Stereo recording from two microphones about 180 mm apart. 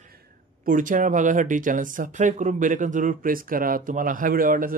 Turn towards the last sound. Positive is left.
turn(degrees=-50)  # may be behind; listen again after turning